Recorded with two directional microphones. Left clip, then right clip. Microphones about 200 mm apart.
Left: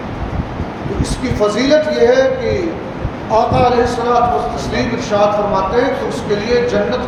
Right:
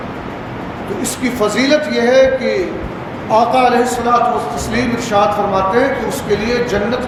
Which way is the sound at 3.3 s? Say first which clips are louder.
Right 1 dB; 45° right (ahead or behind).